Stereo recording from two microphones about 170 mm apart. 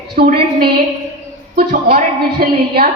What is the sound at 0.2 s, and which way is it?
A woman's voice, 65° right (ahead or behind).